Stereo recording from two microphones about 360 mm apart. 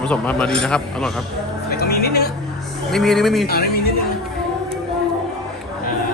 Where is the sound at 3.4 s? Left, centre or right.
Left.